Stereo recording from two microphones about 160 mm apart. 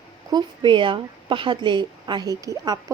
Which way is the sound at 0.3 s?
30° right (ahead or behind).